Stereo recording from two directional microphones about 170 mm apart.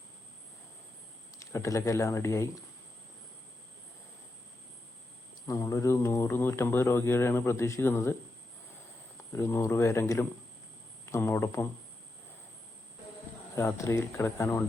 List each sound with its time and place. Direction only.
1.4 s speech: 20° left (ahead or behind)
5.5 s speech: 20° left (ahead or behind)
9.3 s speech: 15° left (ahead or behind)
13.6 s speech: 15° left (ahead or behind)